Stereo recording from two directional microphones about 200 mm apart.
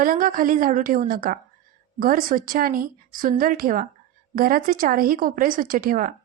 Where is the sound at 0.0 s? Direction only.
45° right (ahead or behind).